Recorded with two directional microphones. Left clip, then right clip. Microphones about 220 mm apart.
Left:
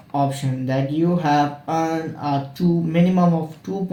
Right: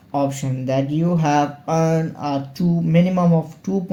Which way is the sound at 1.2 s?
45° right (ahead or behind).